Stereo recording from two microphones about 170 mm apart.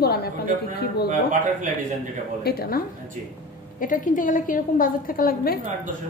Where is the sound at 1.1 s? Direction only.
50° right (ahead or behind).